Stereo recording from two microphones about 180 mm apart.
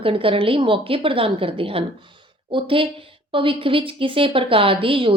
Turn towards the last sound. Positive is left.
turn(degrees=-30)  # may be behind; listen again after turning